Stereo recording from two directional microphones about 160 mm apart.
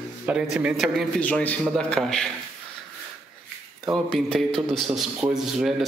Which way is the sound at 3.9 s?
5° left (ahead or behind).